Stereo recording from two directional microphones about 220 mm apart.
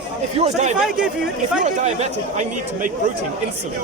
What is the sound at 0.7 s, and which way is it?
Speech, 5° right (ahead or behind).